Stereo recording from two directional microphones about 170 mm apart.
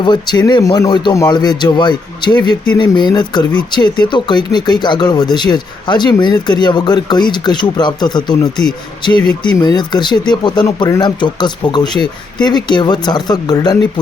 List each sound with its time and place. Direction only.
0.0 s speech: 25° left (ahead or behind)